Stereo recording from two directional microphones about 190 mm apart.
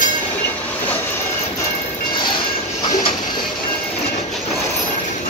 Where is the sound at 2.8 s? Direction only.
20° left (ahead or behind).